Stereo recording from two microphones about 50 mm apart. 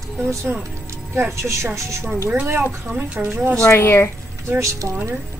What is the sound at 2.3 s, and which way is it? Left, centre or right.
Speech, right.